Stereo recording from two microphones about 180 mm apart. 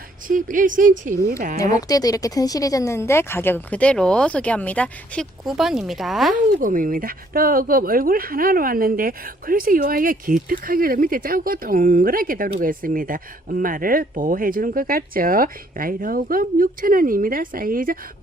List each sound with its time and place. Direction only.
0.3 s speech: 45° right (ahead or behind)
1.9 s speech: 20° left (ahead or behind); by 6.3 s centre (ahead or behind)
6.6 s speech: 50° right (ahead or behind)